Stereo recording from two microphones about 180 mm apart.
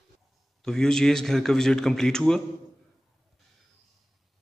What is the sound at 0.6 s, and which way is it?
A man's voice, 5° left (ahead or behind).